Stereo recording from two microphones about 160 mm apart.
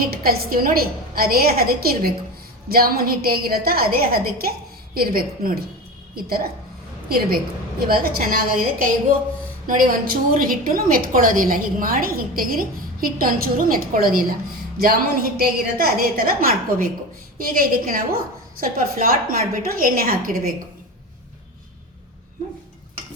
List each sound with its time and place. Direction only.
0.0 s a woman's voice: 70° right (ahead or behind)
7.8 s a woman's voice: 70° right (ahead or behind)